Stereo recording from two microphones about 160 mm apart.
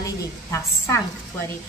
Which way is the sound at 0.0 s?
15° left (ahead or behind).